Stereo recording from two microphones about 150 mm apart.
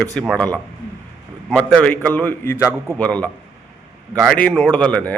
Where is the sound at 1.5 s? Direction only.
5° left (ahead or behind).